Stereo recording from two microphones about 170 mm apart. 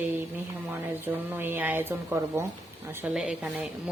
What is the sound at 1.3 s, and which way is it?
Speech, 10° right (ahead or behind).